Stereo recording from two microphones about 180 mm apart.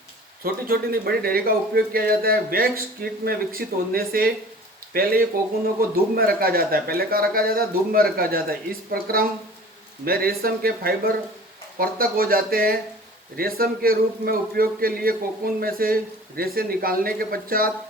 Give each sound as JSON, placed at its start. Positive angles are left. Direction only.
{"t": 0.4, "sound": "speech", "side_deg": -55}